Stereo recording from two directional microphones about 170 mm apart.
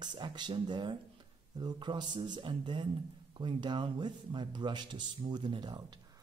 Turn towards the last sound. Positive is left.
turn(degrees=-25)  # may be behind; listen again after turning